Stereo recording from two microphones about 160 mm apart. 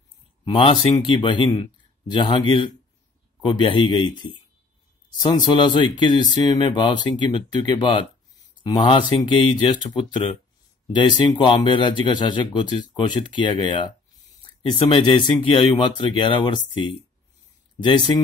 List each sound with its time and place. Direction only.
0.5 s speech: 30° left (ahead or behind)